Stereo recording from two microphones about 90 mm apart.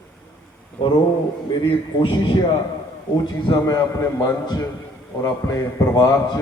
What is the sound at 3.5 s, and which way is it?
A man's voice, 35° left (ahead or behind).